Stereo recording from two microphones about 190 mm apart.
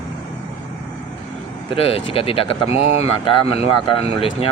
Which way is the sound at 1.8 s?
30° left (ahead or behind).